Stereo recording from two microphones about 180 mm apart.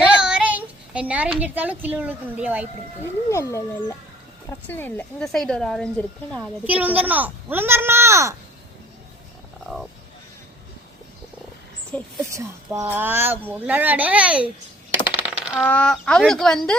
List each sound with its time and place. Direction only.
0.0 s a child's voice: 5° right (ahead or behind)
3.2 s speech: 15° left (ahead or behind)
6.7 s speech: 10° right (ahead or behind)
12.2 s speech: 15° right (ahead or behind)
15.1 s coin: 10° right (ahead or behind)
15.6 s speech: 5° left (ahead or behind)